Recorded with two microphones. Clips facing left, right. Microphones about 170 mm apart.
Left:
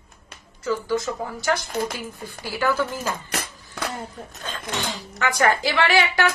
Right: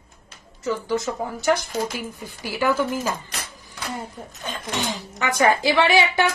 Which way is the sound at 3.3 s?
60° left (ahead or behind).